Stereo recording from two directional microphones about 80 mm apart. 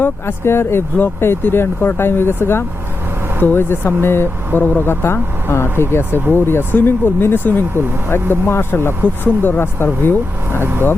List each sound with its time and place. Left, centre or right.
0.0 s speech: left
10.6 s speech: right